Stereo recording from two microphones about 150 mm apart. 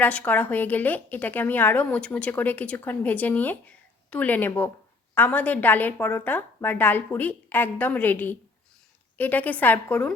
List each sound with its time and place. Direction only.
0.0 s a woman's voice: 10° left (ahead or behind)